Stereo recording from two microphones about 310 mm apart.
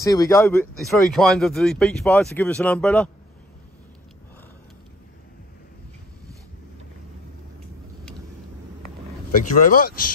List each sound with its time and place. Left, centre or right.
0.0 s speech: centre
9.3 s speech: left